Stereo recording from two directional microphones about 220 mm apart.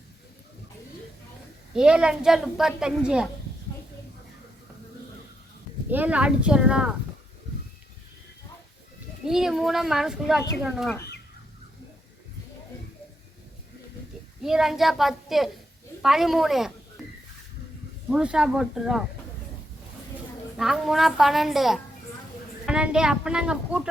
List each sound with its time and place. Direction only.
1.7 s a woman's voice: 5° right (ahead or behind)
5.9 s a woman's voice: 5° right (ahead or behind)
9.2 s a woman's voice: centre (ahead or behind)
14.4 s a woman's voice: centre (ahead or behind)
18.1 s a woman's voice: 5° right (ahead or behind)
20.6 s a woman's voice: centre (ahead or behind)